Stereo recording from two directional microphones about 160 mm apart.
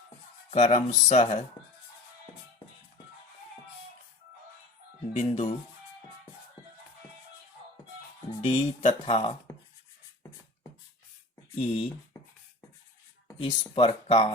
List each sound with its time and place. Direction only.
0.5 s speech: 50° left (ahead or behind)
5.1 s speech: 40° left (ahead or behind)
8.4 s speech: 40° left (ahead or behind)
11.5 s speech: 40° left (ahead or behind)
13.4 s speech: 35° left (ahead or behind)